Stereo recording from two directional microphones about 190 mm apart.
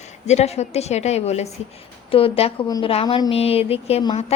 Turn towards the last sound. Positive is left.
turn(degrees=35)  # may be behind; listen again after turning